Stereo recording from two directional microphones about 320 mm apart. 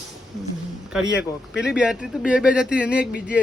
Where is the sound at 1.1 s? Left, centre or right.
Left.